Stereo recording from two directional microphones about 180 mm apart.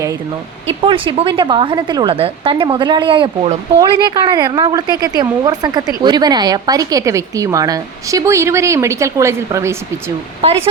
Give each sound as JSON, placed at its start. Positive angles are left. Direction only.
{"t": 0.8, "sound": "a woman's voice", "side_deg": -30}
{"t": 10.4, "sound": "speech", "side_deg": -35}